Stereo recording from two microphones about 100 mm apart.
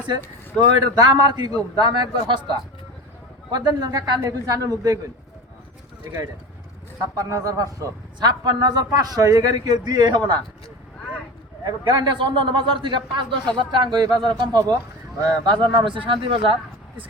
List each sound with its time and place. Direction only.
0.6 s a man's voice: 40° right (ahead or behind)
7.2 s a man's voice: 35° right (ahead or behind)
11.9 s a man's voice: 55° right (ahead or behind)